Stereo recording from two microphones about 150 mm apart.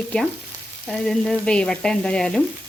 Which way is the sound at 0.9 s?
5° left (ahead or behind).